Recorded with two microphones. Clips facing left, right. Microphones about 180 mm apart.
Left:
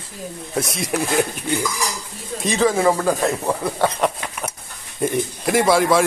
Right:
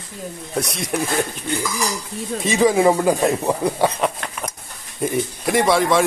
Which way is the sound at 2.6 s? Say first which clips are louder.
Right 2 dB; 15° right (ahead or behind).